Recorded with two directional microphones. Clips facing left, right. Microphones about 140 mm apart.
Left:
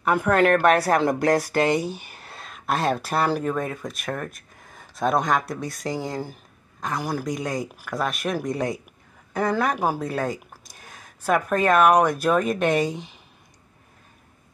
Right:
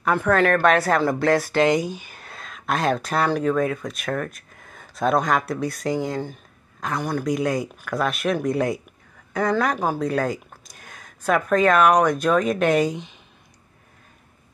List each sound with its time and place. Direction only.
0.1 s a woman's voice: 10° left (ahead or behind)
1.5 s speech: 35° left (ahead or behind)
2.2 s speech: 5° left (ahead or behind)
4.2 s a sound: centre (ahead or behind)
5.3 s speech: centre (ahead or behind)
9.3 s speech: 10° left (ahead or behind)